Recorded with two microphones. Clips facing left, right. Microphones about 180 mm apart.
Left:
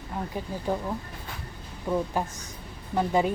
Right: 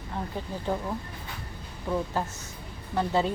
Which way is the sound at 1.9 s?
10° left (ahead or behind).